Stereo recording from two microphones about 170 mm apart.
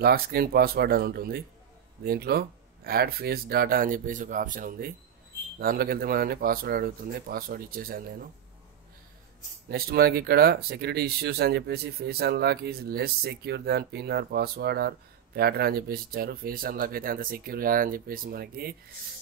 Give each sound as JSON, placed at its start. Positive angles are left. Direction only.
{"t": 0.0, "sound": "speech", "side_deg": -65}
{"t": 9.7, "sound": "speech", "side_deg": -65}